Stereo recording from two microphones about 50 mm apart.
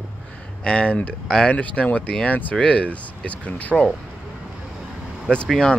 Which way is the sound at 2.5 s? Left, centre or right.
Centre.